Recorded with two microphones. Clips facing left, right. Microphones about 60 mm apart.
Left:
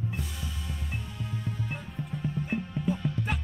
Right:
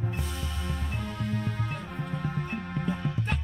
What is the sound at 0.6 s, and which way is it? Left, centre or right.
Music, right.